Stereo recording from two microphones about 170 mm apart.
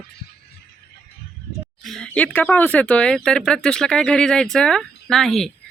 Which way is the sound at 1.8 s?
5° left (ahead or behind).